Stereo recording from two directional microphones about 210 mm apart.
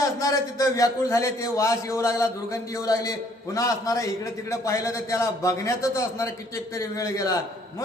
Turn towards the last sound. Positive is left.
turn(degrees=15)  # may be behind; listen again after turning